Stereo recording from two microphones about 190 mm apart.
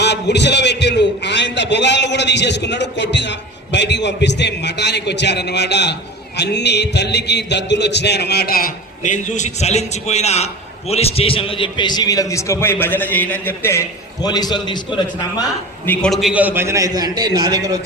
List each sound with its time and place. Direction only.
0.0 s a man's voice: 65° left (ahead or behind); by 15.4 s 20° left (ahead or behind)
15.9 s a man's voice: 5° left (ahead or behind); by 17.7 s 20° right (ahead or behind)